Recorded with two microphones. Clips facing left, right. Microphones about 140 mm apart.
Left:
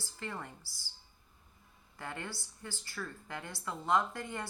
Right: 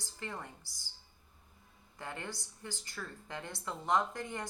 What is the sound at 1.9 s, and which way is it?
A woman's voice, 20° right (ahead or behind).